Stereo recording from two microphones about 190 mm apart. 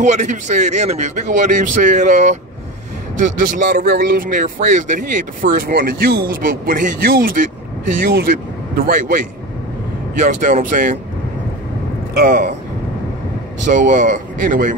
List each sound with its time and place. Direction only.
0.0 s a man's voice: 40° right (ahead or behind)
12.1 s speech: 50° right (ahead or behind)
13.7 s a man's voice: 40° right (ahead or behind)